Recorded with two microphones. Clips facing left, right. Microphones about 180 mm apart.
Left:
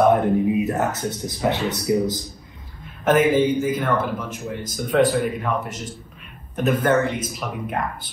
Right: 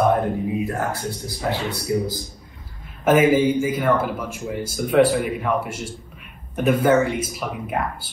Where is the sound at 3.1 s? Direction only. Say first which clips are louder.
Right 1 dB; 10° right (ahead or behind).